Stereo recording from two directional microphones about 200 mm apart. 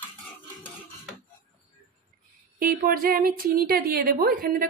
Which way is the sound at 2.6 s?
45° right (ahead or behind).